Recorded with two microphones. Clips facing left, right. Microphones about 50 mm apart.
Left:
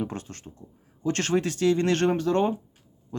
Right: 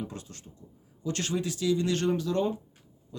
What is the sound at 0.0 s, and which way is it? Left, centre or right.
Speech, left.